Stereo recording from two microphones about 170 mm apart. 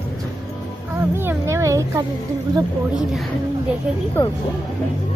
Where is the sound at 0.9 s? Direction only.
15° right (ahead or behind).